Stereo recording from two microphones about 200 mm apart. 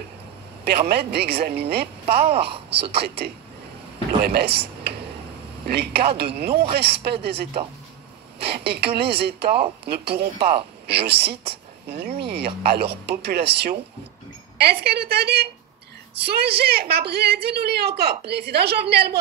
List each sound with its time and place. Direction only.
0.7 s a woman's voice: 55° right (ahead or behind)
2.2 s speech: 30° right (ahead or behind)
2.7 s a woman's voice: 55° right (ahead or behind)
4.2 s a sound: 55° right (ahead or behind)
5.7 s a woman's voice: 50° right (ahead or behind)